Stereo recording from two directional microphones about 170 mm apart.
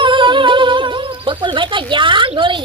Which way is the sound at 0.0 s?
30° right (ahead or behind).